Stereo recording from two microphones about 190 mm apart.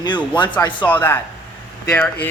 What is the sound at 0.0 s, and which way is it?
Speech, 25° left (ahead or behind).